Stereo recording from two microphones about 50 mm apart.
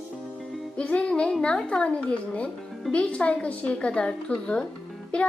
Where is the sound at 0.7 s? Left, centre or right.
Left.